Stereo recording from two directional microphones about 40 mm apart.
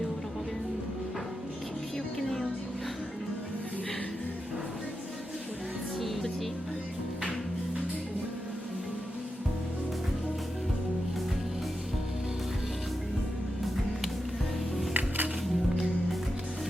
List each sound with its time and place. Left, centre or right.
2.1 s music: centre
6.0 s music: centre
14.9 s music: right